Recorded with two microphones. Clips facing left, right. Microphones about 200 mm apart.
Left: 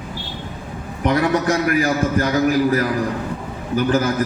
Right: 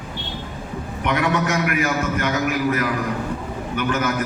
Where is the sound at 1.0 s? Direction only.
35° left (ahead or behind).